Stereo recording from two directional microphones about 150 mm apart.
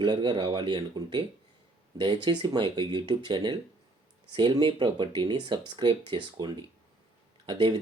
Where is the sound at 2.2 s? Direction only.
30° right (ahead or behind).